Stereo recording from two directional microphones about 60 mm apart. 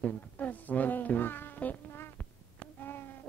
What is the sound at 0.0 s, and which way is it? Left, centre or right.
Speech, left.